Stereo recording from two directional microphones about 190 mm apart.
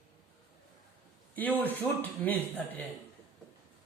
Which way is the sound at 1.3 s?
10° left (ahead or behind).